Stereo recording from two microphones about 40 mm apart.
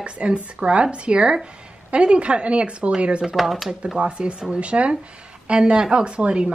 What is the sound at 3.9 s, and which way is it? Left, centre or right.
Speech, right.